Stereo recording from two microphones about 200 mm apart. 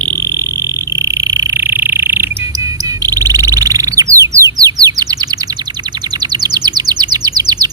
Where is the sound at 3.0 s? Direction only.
20° right (ahead or behind).